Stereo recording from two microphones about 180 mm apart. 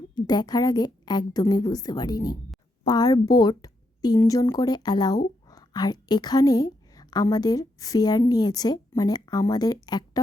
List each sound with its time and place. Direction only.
0.1 s a woman's voice: 25° left (ahead or behind)